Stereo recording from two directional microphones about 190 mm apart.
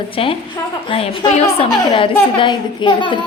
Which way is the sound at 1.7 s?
20° left (ahead or behind).